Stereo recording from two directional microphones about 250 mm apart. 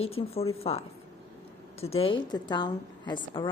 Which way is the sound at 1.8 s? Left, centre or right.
Left.